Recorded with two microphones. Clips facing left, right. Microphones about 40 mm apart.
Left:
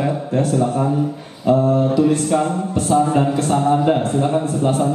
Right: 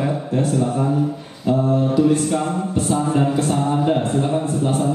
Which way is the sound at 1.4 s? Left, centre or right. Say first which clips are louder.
Left 3 dB; centre.